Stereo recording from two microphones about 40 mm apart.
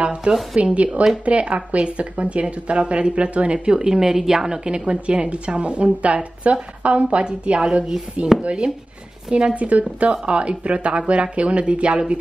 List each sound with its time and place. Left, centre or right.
0.0 s a sound: right
0.6 s speech: right
3.6 s a woman's voice: centre